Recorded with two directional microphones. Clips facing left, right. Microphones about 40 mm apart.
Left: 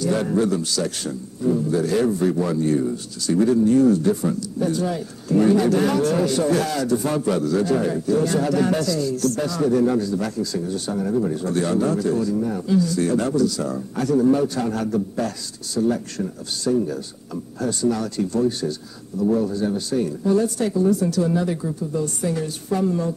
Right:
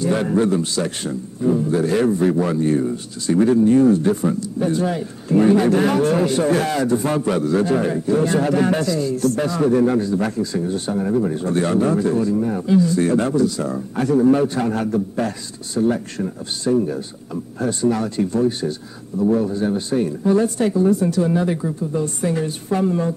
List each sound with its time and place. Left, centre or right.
0.0 s a man's voice: right